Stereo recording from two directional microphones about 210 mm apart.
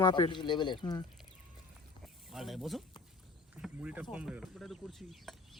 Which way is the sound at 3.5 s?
5° right (ahead or behind).